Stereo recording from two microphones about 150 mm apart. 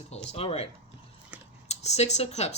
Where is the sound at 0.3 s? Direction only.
40° left (ahead or behind).